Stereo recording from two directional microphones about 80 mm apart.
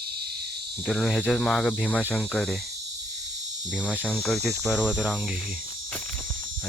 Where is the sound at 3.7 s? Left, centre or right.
Centre.